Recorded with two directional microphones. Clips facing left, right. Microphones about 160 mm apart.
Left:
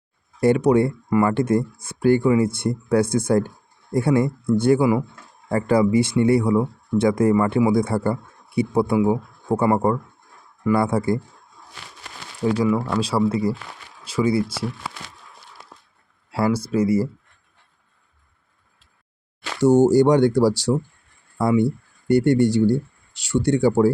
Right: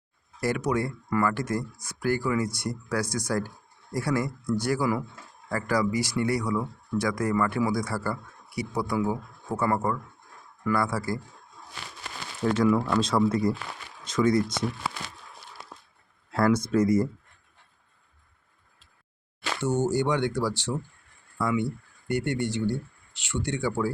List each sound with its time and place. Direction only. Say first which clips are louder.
0.3 s speech: left 10 dB; 25° left (ahead or behind)
12.6 s speech: left 2 dB; 5° left (ahead or behind)
14.0 s a sound: left 2 dB; 10° left (ahead or behind)
16.3 s speech: left 2 dB; 10° left (ahead or behind)
19.6 s speech: left 11 dB; 40° left (ahead or behind)